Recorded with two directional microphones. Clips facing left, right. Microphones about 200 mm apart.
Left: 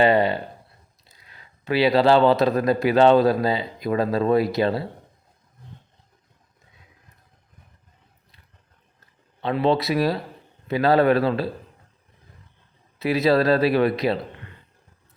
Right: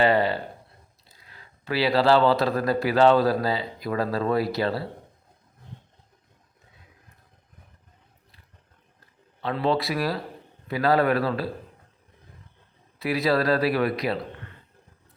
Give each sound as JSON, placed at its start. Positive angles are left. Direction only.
{"t": 0.0, "sound": "speech", "side_deg": 20}
{"t": 1.6, "sound": "speech", "side_deg": 20}
{"t": 9.4, "sound": "speech", "side_deg": 20}
{"t": 13.0, "sound": "speech", "side_deg": 25}